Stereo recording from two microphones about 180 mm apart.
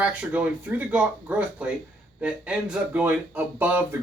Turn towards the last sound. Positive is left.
turn(degrees=-10)  # may be behind; listen again after turning